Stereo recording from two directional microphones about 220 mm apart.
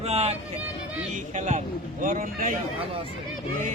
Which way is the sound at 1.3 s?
35° right (ahead or behind).